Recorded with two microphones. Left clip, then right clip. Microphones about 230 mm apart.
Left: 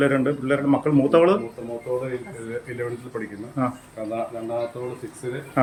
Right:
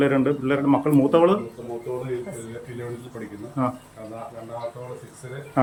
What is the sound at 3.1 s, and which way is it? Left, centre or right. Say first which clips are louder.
Speech: left 6 dB; centre.